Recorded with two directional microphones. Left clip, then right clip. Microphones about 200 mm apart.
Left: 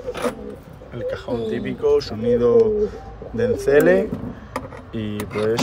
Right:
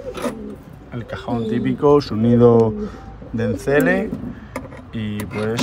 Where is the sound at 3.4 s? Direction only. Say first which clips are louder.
Left 2 dB; 10° left (ahead or behind).